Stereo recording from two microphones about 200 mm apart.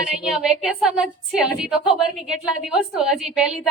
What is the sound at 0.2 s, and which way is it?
A woman's voice, 5° right (ahead or behind).